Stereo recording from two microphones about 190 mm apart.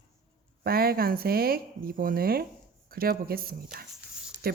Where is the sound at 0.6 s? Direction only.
55° right (ahead or behind).